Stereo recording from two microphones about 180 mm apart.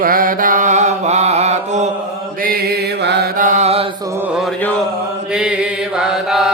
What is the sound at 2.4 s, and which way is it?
Mantra, 55° right (ahead or behind).